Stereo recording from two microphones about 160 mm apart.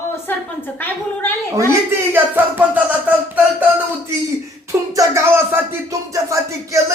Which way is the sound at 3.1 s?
10° right (ahead or behind).